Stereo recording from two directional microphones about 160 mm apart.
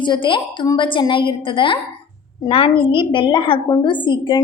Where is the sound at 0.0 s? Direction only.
30° left (ahead or behind).